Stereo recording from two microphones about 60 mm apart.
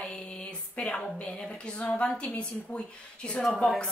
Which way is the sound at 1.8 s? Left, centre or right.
Centre.